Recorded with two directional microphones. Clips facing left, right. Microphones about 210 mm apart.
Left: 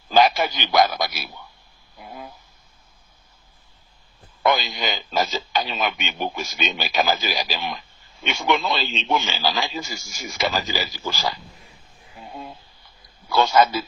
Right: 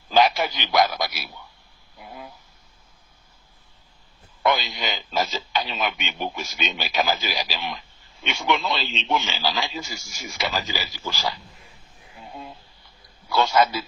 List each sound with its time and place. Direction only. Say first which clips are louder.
0.1 s a man's voice: left 2 dB; 45° left (ahead or behind)
4.4 s speech: left 2 dB; 45° left (ahead or behind)
13.3 s speech: left 2 dB; 45° left (ahead or behind)